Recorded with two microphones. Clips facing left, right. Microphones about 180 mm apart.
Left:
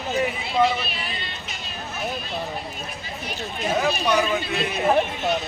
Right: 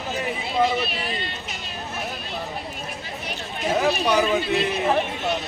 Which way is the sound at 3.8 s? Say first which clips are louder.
Right 2 dB; 5° right (ahead or behind).